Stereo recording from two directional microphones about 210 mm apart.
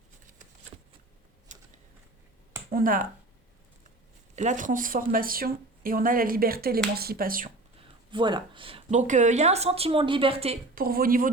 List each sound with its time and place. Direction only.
1.5 s a sound: 35° right (ahead or behind)
2.6 s speech: 40° right (ahead or behind)
4.4 s speech: 35° right (ahead or behind)
8.1 s speech: 20° right (ahead or behind)
10.8 s speech: 45° right (ahead or behind)